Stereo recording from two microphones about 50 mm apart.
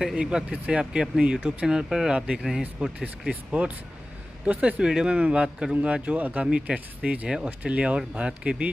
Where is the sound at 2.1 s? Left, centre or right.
Centre.